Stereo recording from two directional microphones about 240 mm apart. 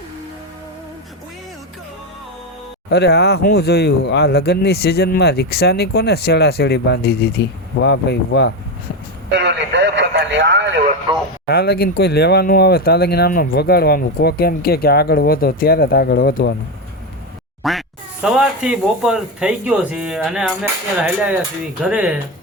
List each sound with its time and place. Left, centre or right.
2.9 s speech: left
9.3 s speech: right
11.4 s speech: left
17.6 s speech: centre